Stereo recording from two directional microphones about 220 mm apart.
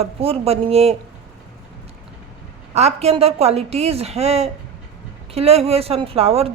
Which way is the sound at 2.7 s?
30° right (ahead or behind).